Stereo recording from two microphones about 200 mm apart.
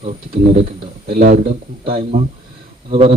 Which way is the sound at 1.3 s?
30° right (ahead or behind).